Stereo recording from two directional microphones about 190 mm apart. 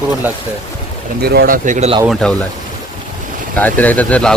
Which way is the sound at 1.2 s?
55° right (ahead or behind).